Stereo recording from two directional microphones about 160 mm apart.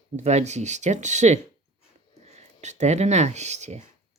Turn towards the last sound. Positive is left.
turn(degrees=-45)  # may be behind; listen again after turning